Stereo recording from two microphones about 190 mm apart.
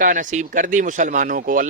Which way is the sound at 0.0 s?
45° right (ahead or behind).